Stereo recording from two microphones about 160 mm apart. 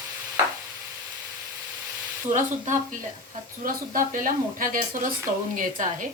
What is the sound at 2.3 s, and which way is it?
Speech, 50° right (ahead or behind).